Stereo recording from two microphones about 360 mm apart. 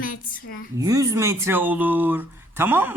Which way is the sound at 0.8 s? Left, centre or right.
Centre.